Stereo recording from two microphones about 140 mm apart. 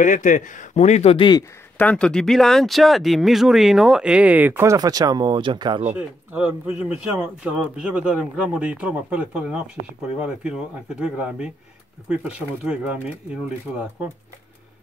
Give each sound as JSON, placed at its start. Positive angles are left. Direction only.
{"t": 0.0, "sound": "speech", "side_deg": 65}
{"t": 1.8, "sound": "speech", "side_deg": 5}
{"t": 5.9, "sound": "speech", "side_deg": -10}
{"t": 12.6, "sound": "speech", "side_deg": -10}